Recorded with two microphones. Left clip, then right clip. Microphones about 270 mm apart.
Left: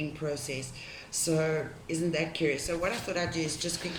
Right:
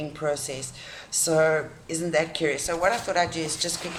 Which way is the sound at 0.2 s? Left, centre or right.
Right.